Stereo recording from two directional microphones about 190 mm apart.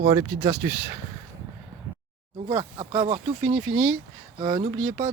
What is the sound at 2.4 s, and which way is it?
Speech, 25° right (ahead or behind).